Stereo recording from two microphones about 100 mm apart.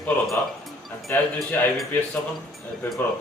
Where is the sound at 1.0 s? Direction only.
20° left (ahead or behind).